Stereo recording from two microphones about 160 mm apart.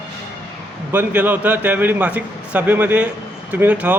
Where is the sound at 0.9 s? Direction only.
10° right (ahead or behind).